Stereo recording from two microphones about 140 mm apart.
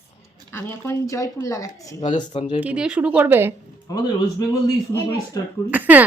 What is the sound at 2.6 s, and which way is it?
Speech, 5° right (ahead or behind).